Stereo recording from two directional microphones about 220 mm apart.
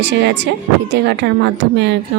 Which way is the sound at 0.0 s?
50° right (ahead or behind).